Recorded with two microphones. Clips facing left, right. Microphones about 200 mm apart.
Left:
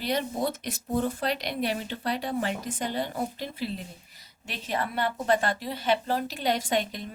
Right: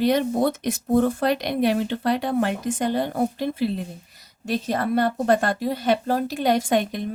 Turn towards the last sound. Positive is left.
turn(degrees=-55)  # may be behind; listen again after turning